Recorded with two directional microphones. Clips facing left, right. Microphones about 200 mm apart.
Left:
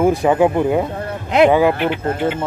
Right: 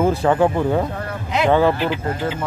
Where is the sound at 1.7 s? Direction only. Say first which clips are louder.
Left 2 dB; 60° left (ahead or behind).